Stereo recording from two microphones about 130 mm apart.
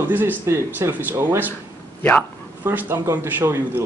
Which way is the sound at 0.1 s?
15° right (ahead or behind).